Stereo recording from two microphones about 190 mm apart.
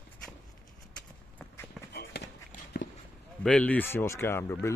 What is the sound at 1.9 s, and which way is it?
Run, 60° left (ahead or behind).